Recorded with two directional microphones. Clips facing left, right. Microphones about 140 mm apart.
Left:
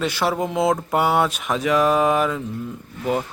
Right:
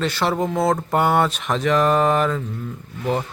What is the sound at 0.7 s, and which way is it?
Speech, 5° left (ahead or behind).